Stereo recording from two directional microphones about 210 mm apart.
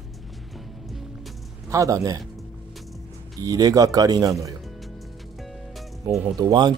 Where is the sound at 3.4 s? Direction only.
15° right (ahead or behind).